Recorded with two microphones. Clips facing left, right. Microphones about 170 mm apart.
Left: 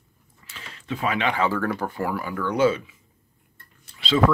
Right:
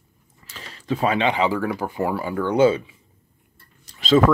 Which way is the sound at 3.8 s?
45° right (ahead or behind).